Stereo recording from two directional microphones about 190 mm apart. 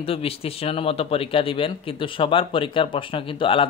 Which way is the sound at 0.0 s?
30° left (ahead or behind).